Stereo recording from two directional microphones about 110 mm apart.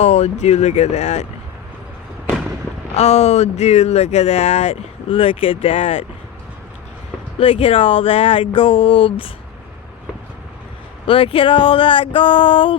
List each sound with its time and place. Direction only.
0.0 s speech: 85° left
2.9 s speech: 90° left
5.1 s speech: 55° left (ahead or behind)
7.3 s speech: 60° left (ahead or behind)
11.0 s speech: 55° left (ahead or behind)